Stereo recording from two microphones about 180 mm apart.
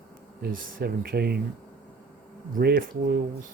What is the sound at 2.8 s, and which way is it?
Speech, 55° right (ahead or behind).